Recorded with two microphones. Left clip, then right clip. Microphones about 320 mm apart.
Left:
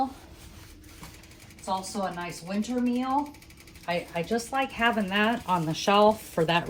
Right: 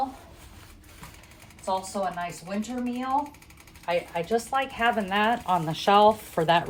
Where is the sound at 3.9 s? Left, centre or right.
Right.